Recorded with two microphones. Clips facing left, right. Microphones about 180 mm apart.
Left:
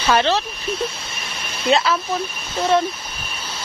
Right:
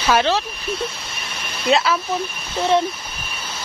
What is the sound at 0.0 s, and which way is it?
Speech, 5° right (ahead or behind).